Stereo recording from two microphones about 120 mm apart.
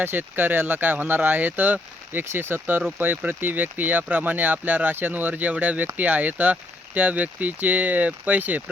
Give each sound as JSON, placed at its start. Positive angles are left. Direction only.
{"t": 0.0, "sound": "speech", "side_deg": -15}